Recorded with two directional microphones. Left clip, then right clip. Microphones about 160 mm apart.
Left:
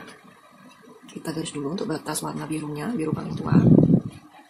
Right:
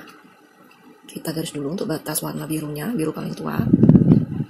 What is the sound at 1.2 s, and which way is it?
Speech, 20° right (ahead or behind).